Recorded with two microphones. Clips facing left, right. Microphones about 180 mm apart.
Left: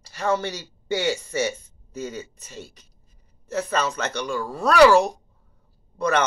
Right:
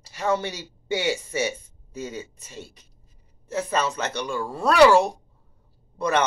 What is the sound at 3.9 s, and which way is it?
Speech, 10° right (ahead or behind).